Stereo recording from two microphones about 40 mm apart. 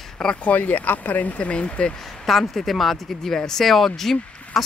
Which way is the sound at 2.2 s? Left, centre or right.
Centre.